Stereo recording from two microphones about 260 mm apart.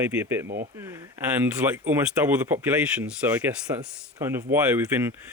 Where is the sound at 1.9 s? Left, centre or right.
Centre.